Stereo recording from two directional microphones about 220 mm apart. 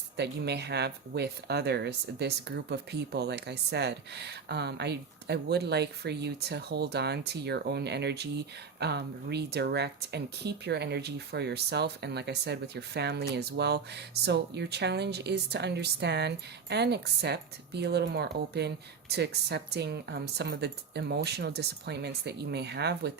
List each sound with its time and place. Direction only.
0.2 s speech: 50° right (ahead or behind)